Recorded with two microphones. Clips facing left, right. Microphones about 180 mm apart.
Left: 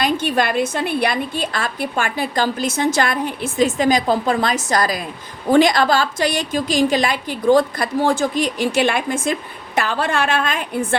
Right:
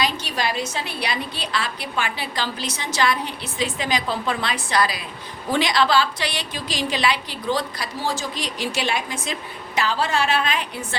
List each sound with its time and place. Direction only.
0.0 s a woman's voice: 50° left (ahead or behind)